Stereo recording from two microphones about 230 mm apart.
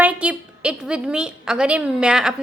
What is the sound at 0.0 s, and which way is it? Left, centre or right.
A woman's voice, centre.